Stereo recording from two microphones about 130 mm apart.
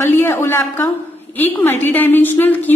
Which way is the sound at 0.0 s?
20° left (ahead or behind).